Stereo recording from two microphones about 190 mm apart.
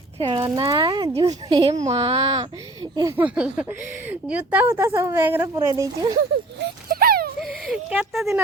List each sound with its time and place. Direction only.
0.2 s speech: 25° right (ahead or behind)
1.2 s speech: 30° right (ahead or behind)
1.5 s speech: 20° right (ahead or behind)
1.9 s speech: 30° right (ahead or behind)
6.6 s a sound: 50° right (ahead or behind)
7.4 s speech: centre (ahead or behind)